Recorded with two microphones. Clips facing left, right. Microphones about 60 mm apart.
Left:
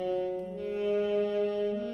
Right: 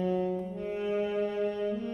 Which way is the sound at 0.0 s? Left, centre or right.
Right.